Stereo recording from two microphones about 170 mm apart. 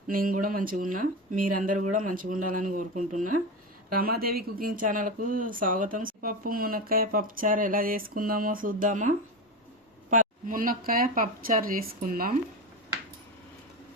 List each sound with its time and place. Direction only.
0.1 s speech: 55° right (ahead or behind)